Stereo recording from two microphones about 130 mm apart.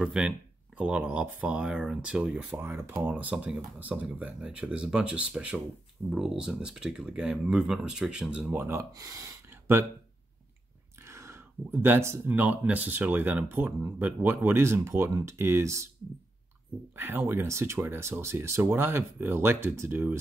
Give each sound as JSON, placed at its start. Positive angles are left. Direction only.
{"t": 0.0, "sound": "speech", "side_deg": -5}
{"t": 9.5, "sound": "a sound", "side_deg": -15}
{"t": 11.0, "sound": "speech", "side_deg": -20}
{"t": 16.9, "sound": "speech", "side_deg": -15}